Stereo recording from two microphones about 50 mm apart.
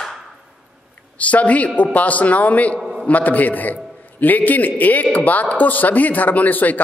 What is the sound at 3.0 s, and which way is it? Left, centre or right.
Speech, left.